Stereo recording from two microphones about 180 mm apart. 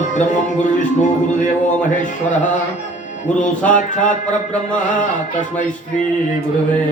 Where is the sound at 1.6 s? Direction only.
40° left (ahead or behind).